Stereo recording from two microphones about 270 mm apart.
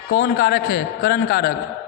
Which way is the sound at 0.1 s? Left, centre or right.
Left.